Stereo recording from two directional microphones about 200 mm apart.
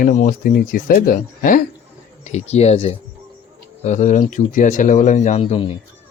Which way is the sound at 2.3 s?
35° left (ahead or behind).